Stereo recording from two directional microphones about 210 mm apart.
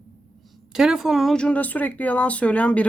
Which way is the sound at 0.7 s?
Centre (ahead or behind).